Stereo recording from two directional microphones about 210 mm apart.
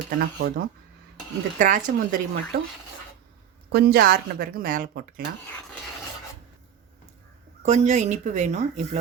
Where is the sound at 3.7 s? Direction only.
50° right (ahead or behind).